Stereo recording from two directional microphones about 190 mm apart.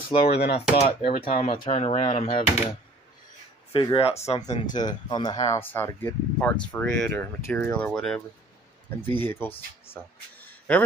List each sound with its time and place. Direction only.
0.2 s speech: 60° left (ahead or behind)
0.6 s speech: 30° left (ahead or behind)
3.7 s speech: 25° left (ahead or behind)
4.7 s speech: 20° left (ahead or behind); by 8.2 s 5° left (ahead or behind)
9.2 s speech: 10° left (ahead or behind)
10.7 s speech: 5° left (ahead or behind)